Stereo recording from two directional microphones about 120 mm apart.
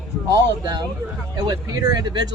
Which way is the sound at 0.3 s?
35° right (ahead or behind).